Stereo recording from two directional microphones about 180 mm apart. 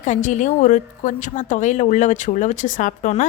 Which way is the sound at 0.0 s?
40° left (ahead or behind).